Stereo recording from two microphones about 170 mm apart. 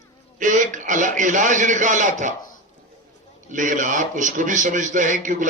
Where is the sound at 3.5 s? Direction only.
50° right (ahead or behind).